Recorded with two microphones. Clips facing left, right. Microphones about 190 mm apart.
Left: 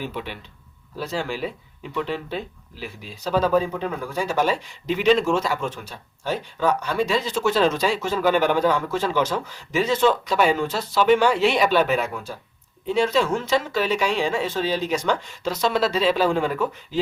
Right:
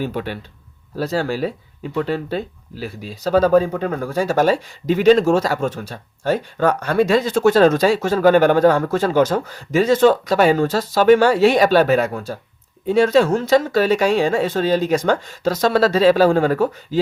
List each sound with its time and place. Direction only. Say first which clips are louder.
0.0 s speech: right 7 dB; 40° right (ahead or behind)